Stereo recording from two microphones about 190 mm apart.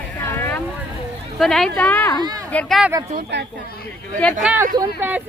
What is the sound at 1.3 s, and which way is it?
Speech, centre (ahead or behind).